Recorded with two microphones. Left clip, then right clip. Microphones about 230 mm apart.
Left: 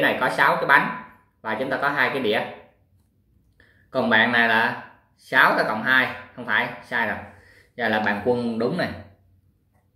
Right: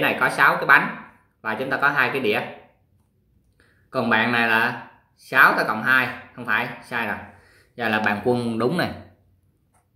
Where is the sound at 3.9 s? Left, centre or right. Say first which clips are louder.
Left 2 dB; centre.